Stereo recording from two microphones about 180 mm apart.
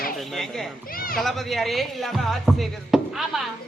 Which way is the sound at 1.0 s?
55° left (ahead or behind).